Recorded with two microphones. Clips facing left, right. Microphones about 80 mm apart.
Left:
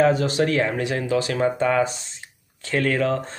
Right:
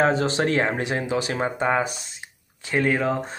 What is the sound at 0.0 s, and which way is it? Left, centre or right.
Speech, right.